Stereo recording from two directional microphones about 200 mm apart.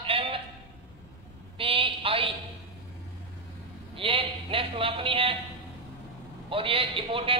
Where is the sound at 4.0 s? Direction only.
25° right (ahead or behind).